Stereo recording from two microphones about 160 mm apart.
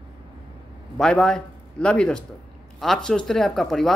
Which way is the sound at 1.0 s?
5° left (ahead or behind).